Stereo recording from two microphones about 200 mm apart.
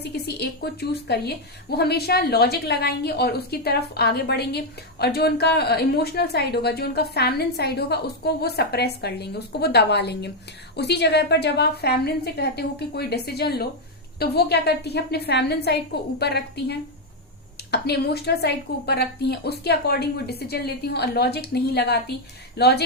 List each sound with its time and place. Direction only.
0.0 s a woman's voice: 55° left (ahead or behind)